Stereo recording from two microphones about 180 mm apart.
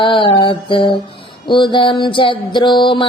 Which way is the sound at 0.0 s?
30° left (ahead or behind).